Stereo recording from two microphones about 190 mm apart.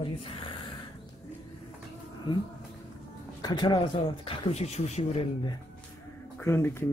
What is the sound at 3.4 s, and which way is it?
Speech, 20° left (ahead or behind).